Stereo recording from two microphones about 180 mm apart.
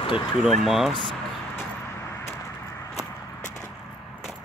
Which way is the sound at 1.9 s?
15° left (ahead or behind).